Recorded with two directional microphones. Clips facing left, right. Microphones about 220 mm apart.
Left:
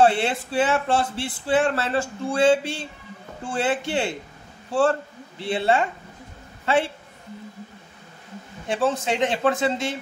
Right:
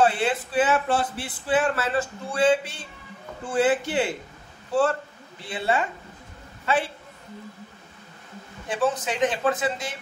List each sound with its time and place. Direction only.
0.0 s speech: 30° left (ahead or behind)
5.4 s a man's voice: 30° left (ahead or behind)
8.6 s speech: 30° left (ahead or behind)